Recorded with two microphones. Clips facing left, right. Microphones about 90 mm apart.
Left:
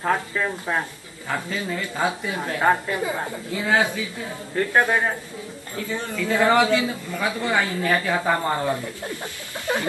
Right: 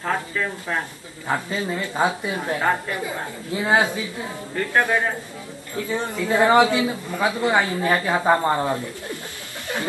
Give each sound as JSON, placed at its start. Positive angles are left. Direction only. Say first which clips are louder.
{"t": 0.0, "sound": "speech", "louder": "left 2 dB", "side_deg": 15}
{"t": 1.2, "sound": "a woman's voice", "louder": "right 3 dB", "side_deg": -20}
{"t": 2.3, "sound": "a woman's voice", "louder": "left 1 dB", "side_deg": 20}
{"t": 3.5, "sound": "a woman's voice", "louder": "right 2 dB", "side_deg": -25}
{"t": 4.7, "sound": "speech", "louder": "even", "side_deg": 15}
{"t": 5.9, "sound": "a woman's voice", "louder": "right 2 dB", "side_deg": -20}